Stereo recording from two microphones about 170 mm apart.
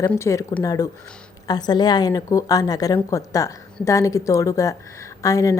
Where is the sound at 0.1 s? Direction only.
15° left (ahead or behind).